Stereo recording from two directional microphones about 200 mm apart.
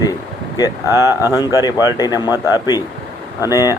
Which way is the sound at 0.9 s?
15° right (ahead or behind).